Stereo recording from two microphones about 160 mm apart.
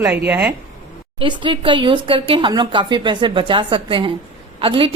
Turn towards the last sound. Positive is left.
turn(degrees=-35)  # may be behind; listen again after turning